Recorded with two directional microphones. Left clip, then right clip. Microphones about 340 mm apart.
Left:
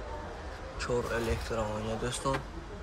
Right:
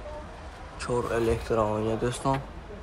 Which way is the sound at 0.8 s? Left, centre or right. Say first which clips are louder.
Right 5 dB; centre.